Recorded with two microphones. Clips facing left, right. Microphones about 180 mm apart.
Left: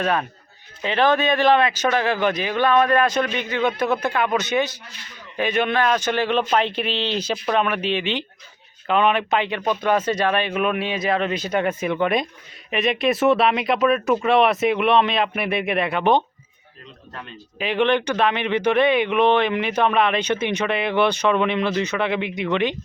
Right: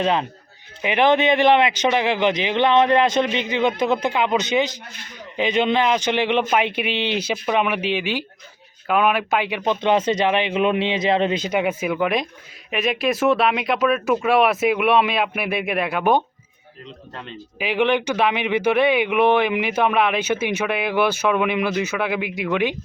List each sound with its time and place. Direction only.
0.0 s speech: 20° right (ahead or behind)
9.6 s speech: 20° right (ahead or behind); by 16.2 s 5° right (ahead or behind)
17.6 s speech: 10° right (ahead or behind)